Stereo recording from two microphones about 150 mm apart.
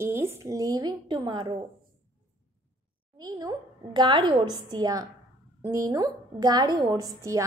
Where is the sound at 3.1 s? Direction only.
25° right (ahead or behind).